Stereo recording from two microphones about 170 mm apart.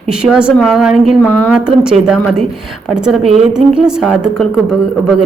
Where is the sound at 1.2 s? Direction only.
10° left (ahead or behind).